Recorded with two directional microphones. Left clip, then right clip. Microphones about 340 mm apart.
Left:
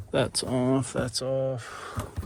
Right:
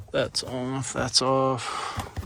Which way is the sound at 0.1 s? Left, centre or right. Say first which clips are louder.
Even; centre.